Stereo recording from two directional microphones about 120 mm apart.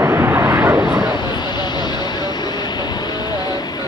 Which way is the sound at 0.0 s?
20° right (ahead or behind).